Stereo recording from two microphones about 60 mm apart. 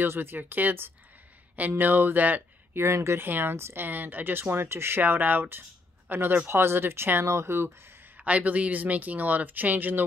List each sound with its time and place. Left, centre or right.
0.0 s speech: right
2.8 s speech: right
3.2 s speech: right
3.5 s speech: right
3.8 s speech: right
8.2 s speech: right